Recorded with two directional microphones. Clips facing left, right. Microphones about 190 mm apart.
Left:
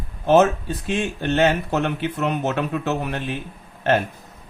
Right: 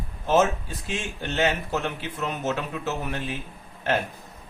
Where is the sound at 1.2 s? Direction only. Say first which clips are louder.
Left 6 dB; 60° left (ahead or behind).